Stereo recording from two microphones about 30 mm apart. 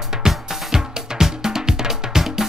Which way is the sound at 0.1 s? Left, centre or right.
Centre.